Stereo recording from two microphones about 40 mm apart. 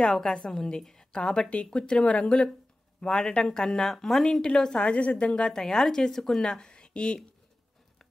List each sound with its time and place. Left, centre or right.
0.0 s speech: centre
4.8 s speech: left
5.3 s speech: centre